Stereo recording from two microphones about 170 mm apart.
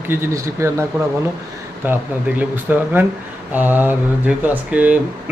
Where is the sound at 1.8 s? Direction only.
10° right (ahead or behind).